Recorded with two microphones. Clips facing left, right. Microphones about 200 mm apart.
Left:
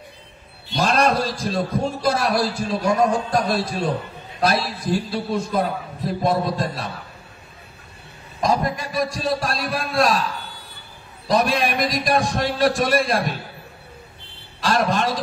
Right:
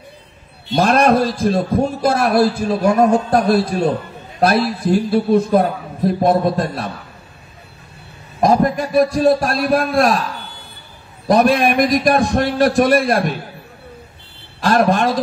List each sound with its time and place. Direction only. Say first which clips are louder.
0.7 s a man's voice: right 6 dB; 55° right (ahead or behind)
8.4 s a man's voice: right 7 dB; 55° right (ahead or behind)
11.2 s a man's voice: right 7 dB; 55° right (ahead or behind)
14.6 s a man's voice: right 6 dB; 55° right (ahead or behind)